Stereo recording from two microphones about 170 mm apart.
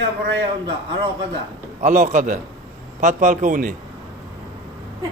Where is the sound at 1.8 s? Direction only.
45° right (ahead or behind).